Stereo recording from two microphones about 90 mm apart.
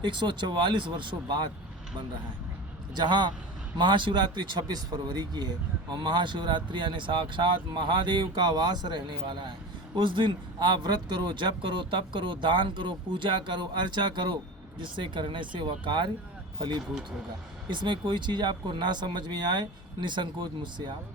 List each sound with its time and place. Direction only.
0.0 s speech: 55° right (ahead or behind)
2.9 s speech: 55° right (ahead or behind)